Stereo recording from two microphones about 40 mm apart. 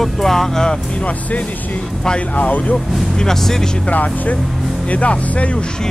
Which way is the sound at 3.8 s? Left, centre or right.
Left.